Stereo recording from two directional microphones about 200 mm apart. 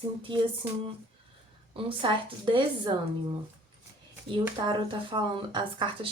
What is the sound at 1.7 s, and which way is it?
Speech, 25° right (ahead or behind).